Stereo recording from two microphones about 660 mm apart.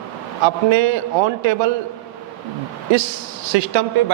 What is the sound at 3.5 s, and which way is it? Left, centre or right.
Speech, right.